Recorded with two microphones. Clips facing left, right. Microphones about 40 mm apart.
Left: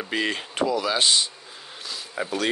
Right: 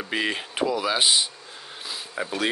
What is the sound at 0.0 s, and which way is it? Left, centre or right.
Speech, centre.